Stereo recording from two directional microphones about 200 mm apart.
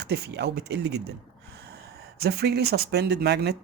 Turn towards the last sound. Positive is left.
turn(degrees=-55)  # may be behind; listen again after turning